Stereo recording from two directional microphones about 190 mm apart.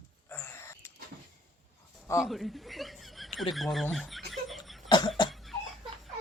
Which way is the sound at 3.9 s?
Centre (ahead or behind).